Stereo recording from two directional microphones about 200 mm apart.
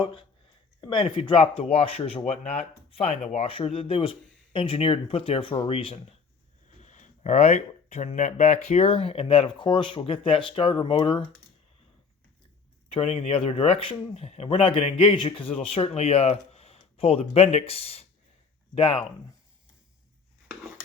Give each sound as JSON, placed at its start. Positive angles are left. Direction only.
{"t": 0.8, "sound": "speech", "side_deg": 20}
{"t": 12.9, "sound": "speech", "side_deg": 30}